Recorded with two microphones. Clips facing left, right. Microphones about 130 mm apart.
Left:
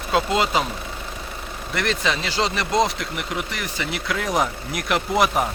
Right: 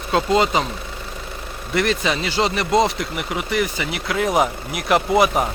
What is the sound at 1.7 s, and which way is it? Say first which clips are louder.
Speech: right 4 dB; 5° right (ahead or behind).